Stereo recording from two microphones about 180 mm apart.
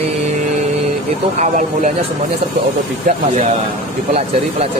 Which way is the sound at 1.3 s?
40° right (ahead or behind).